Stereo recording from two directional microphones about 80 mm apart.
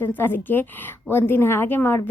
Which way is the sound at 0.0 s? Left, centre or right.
Left.